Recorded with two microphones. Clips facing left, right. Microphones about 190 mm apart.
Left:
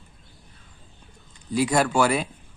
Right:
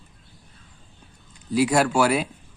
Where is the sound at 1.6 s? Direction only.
5° right (ahead or behind).